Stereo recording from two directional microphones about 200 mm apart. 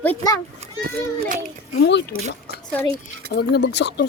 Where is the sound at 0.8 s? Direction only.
40° right (ahead or behind).